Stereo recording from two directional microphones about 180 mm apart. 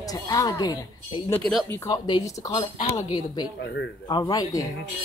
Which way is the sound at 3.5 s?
70° left (ahead or behind).